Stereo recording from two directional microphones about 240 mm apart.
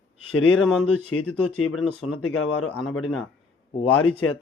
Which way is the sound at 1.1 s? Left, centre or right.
Left.